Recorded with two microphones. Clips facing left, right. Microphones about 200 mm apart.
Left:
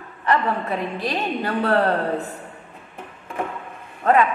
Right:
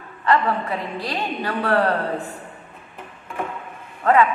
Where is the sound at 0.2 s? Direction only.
20° left (ahead or behind).